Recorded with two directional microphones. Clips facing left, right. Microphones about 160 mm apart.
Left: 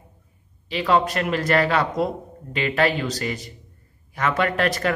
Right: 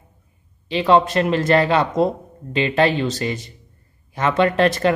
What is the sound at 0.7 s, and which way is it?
Speech, 25° right (ahead or behind).